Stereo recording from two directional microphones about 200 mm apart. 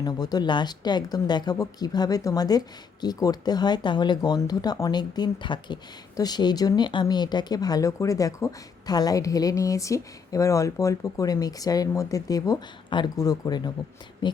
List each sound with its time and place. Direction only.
0.0 s speech: 20° left (ahead or behind)